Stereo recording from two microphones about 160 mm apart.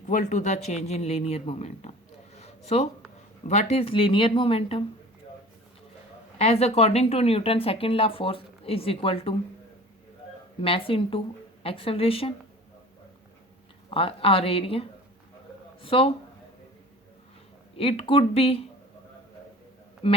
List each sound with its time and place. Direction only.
0.0 s speech: 50° left (ahead or behind)
2.3 s a sound: 40° left (ahead or behind)
3.4 s speech: 45° left (ahead or behind)
6.4 s speech: 40° left (ahead or behind)
10.6 s speech: 35° left (ahead or behind)
13.9 s speech: 35° left (ahead or behind)
17.7 s speech: 35° left (ahead or behind)
20.0 s speech: 35° left (ahead or behind)